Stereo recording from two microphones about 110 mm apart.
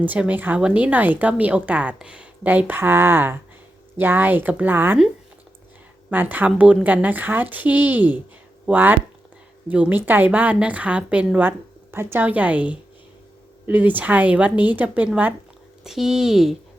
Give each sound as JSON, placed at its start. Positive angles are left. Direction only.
{"t": 0.0, "sound": "speech", "side_deg": -15}
{"t": 6.1, "sound": "speech", "side_deg": -15}
{"t": 15.8, "sound": "speech", "side_deg": -5}